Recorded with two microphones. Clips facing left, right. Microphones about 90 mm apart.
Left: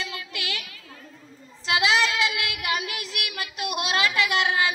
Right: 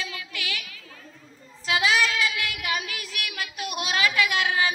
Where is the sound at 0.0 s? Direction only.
35° left (ahead or behind).